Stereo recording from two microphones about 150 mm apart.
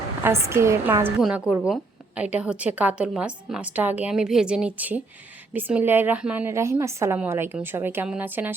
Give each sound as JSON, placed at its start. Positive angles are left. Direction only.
{"t": 0.3, "sound": "a woman's voice", "side_deg": -20}